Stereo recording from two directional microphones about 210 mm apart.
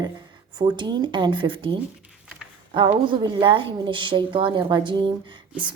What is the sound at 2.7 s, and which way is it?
Speech, 25° right (ahead or behind).